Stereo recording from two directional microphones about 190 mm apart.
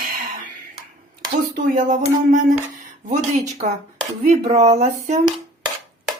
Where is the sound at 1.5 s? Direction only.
45° right (ahead or behind).